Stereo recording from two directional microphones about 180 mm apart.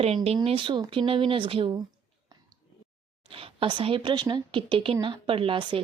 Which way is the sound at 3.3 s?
30° right (ahead or behind).